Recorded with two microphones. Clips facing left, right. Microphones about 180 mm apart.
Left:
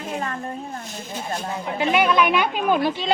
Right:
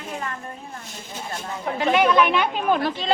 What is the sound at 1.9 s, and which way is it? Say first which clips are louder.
Speech: even; 5° left (ahead or behind).